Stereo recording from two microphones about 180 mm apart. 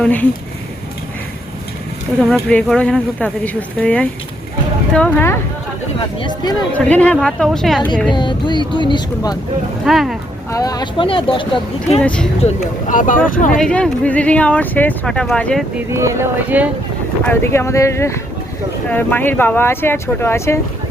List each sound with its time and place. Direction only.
0.0 s speech: 10° left (ahead or behind)
2.3 s speech: 5° left (ahead or behind)
6.0 s speech: 25° left (ahead or behind)
6.7 s speech: 5° left (ahead or behind)
8.1 s speech: 25° left (ahead or behind)
9.8 s speech: centre (ahead or behind)
10.5 s speech: 20° left (ahead or behind)
11.9 s speech: 5° left (ahead or behind)
12.5 s speech: 50° left (ahead or behind)
13.6 s speech: 5° left (ahead or behind)
15.9 s speech: 15° right (ahead or behind)
17.2 s speech: 15° left (ahead or behind)